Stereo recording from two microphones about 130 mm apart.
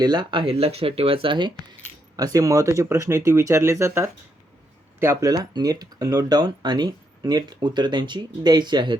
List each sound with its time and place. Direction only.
0.0 s speech: 35° right (ahead or behind)